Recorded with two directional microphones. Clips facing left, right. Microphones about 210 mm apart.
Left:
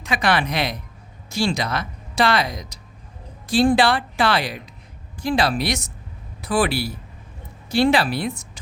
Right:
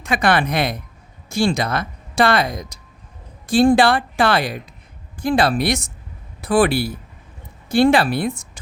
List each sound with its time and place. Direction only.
0.0 s speech: 50° right (ahead or behind)